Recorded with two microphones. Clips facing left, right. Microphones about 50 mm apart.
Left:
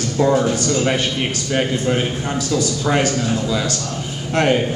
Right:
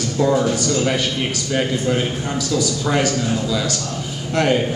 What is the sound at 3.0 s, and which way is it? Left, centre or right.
Speech, left.